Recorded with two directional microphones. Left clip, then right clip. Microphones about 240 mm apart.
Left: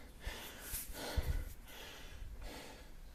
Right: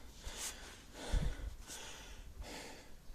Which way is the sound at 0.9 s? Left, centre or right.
Centre.